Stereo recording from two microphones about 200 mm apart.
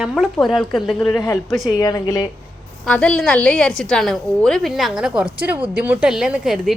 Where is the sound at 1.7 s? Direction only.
20° left (ahead or behind).